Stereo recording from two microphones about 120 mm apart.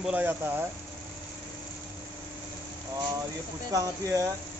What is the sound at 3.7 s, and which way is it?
Speech, 30° right (ahead or behind).